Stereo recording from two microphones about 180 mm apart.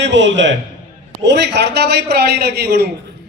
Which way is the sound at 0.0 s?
85° right.